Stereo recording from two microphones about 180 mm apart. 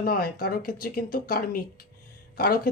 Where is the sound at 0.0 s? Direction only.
55° left (ahead or behind).